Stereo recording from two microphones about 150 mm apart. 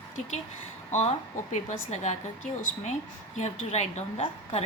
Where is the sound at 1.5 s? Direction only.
50° left (ahead or behind).